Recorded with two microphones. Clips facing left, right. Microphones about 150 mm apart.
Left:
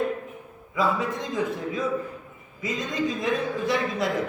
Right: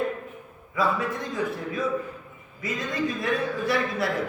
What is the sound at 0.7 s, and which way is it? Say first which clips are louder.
A man's voice: left 1 dB; 20° left (ahead or behind).